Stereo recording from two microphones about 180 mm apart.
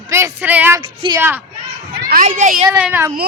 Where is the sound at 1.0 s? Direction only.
25° right (ahead or behind).